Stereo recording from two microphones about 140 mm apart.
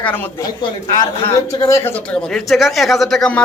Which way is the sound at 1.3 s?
20° left (ahead or behind).